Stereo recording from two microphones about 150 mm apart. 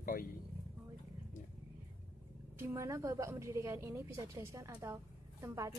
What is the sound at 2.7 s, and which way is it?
A woman's voice, 20° right (ahead or behind).